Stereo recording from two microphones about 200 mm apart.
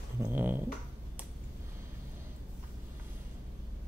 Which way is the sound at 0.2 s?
10° right (ahead or behind).